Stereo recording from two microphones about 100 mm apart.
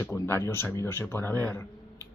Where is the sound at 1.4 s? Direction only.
25° left (ahead or behind).